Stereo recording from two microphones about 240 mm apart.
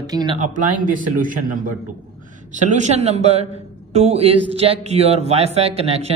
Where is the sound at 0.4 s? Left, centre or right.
Right.